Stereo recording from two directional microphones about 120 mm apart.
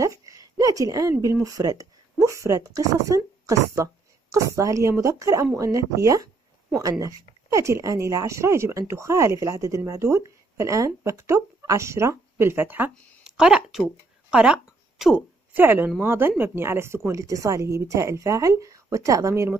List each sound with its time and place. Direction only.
0.0 s a sound: 25° right (ahead or behind)
1.2 s speech: 30° right (ahead or behind); by 15.2 s 5° right (ahead or behind)
15.5 s speech: 15° right (ahead or behind)